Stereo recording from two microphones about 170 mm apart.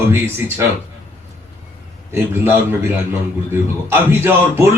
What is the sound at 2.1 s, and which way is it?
Speech, 15° right (ahead or behind).